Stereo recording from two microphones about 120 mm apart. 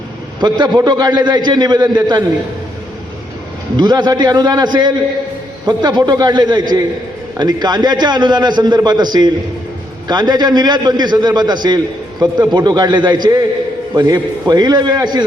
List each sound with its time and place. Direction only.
0.3 s a man's voice: 35° right (ahead or behind)
3.8 s a man's voice: 35° right (ahead or behind)